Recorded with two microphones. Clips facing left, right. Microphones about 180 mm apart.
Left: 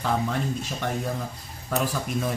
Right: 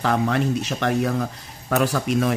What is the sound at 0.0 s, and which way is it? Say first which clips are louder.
Speech: right 5 dB; 80° right.